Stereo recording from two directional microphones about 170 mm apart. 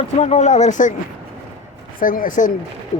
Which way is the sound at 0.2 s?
40° left (ahead or behind).